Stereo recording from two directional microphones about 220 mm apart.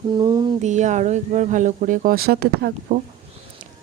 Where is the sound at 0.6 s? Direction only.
35° right (ahead or behind).